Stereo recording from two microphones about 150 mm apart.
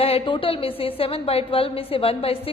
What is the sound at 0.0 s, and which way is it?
A woman's voice, 40° left (ahead or behind).